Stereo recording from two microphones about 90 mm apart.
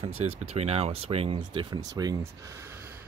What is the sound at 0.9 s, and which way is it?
Speech, 90° right.